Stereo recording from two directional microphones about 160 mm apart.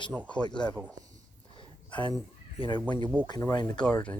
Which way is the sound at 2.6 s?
30° left (ahead or behind).